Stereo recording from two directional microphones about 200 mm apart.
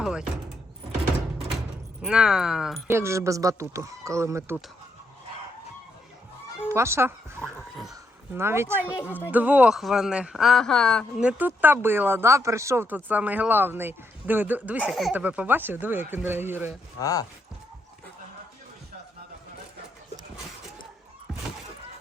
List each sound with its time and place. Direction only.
0.0 s a sound: 5° right (ahead or behind)
2.0 s speech: 5° right (ahead or behind)
2.9 s a man's voice: 15° right (ahead or behind)
6.7 s speech: 15° right (ahead or behind)
7.4 s a sound: centre (ahead or behind)
8.4 s a man's voice: 10° right (ahead or behind)
17.0 s speech: 15° left (ahead or behind)